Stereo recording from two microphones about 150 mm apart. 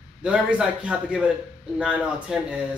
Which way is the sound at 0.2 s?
5° right (ahead or behind).